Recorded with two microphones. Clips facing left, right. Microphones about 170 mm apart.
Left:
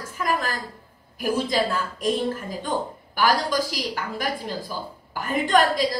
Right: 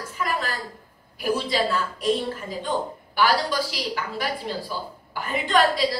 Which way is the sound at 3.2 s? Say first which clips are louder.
Even; 45° left (ahead or behind).